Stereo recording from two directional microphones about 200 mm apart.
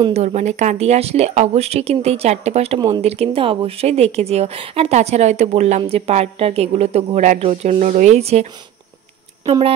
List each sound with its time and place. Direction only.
0.0 s speech: 35° right (ahead or behind)
9.5 s a woman's voice: 30° right (ahead or behind)